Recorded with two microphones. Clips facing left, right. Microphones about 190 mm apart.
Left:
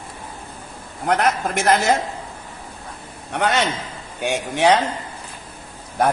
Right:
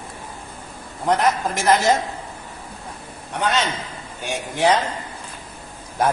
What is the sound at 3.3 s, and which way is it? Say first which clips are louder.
A woman's voice: left 2 dB; 65° left (ahead or behind).